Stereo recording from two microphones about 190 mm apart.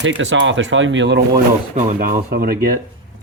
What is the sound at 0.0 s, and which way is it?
Speech, 75° right (ahead or behind).